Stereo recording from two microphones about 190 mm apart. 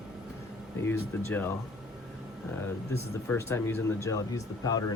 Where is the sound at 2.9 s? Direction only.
10° left (ahead or behind).